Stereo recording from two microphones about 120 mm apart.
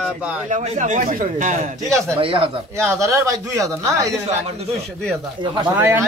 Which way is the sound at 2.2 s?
50° right (ahead or behind).